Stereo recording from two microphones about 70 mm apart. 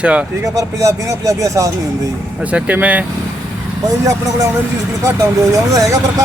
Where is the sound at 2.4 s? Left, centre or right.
Centre.